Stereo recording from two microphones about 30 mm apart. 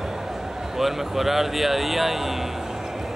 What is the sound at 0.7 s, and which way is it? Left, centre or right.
Speech, centre.